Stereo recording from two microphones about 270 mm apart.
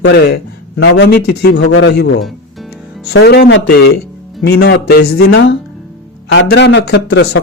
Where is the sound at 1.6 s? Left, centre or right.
Left.